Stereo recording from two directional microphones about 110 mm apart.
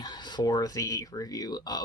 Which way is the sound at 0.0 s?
40° left (ahead or behind).